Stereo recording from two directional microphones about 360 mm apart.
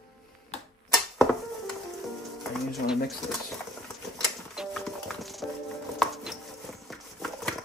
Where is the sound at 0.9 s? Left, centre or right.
Centre.